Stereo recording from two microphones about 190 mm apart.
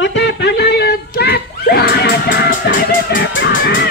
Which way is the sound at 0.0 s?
70° left (ahead or behind).